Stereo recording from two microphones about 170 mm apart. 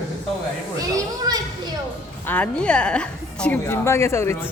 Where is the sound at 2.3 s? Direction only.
5° left (ahead or behind).